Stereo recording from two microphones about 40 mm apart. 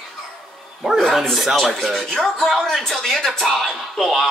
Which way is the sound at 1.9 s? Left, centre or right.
Centre.